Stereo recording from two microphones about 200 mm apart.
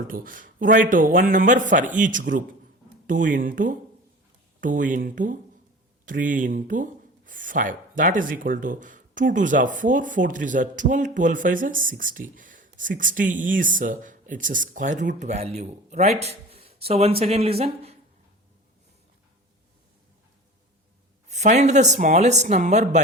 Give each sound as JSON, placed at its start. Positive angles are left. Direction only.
{"t": 0.1, "sound": "speech", "side_deg": -45}
{"t": 21.2, "sound": "speech", "side_deg": -35}